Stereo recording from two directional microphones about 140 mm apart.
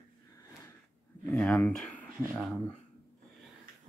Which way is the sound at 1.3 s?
5° left (ahead or behind).